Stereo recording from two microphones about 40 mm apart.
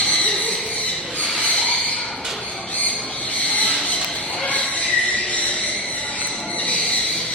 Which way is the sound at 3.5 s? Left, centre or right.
Left.